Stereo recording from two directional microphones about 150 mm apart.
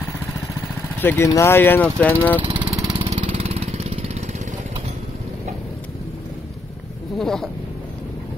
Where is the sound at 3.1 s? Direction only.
50° right (ahead or behind).